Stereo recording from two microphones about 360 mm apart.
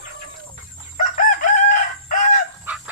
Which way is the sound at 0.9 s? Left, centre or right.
Left.